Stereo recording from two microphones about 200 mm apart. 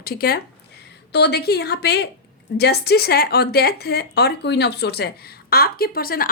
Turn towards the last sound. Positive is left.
turn(degrees=45)  # may be behind; listen again after turning